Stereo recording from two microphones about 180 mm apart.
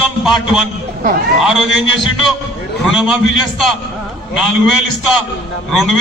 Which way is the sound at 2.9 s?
Centre (ahead or behind).